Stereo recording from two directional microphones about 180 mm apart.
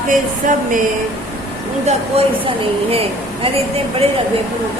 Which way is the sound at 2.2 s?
35° right (ahead or behind).